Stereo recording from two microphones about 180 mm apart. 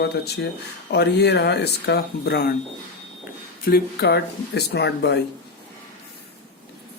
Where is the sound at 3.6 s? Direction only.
60° left (ahead or behind).